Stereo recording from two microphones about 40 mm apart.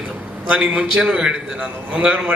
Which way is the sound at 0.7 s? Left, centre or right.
Centre.